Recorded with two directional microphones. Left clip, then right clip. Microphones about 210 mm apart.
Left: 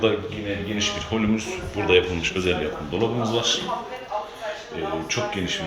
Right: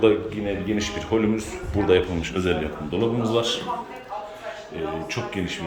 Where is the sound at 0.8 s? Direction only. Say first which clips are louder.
Even; 20° right (ahead or behind).